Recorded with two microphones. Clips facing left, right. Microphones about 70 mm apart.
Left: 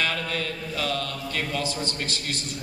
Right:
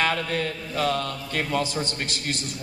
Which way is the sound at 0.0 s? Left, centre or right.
Right.